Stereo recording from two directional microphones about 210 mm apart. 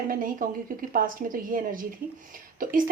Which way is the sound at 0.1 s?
40° right (ahead or behind).